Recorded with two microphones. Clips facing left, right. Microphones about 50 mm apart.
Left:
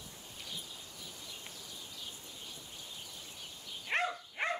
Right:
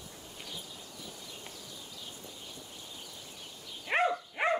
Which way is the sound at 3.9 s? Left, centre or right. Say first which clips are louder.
Right 5 dB; centre.